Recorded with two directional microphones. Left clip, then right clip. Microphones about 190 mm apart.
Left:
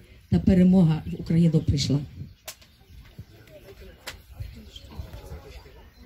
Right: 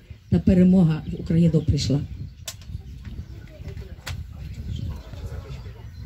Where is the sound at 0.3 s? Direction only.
40° left (ahead or behind).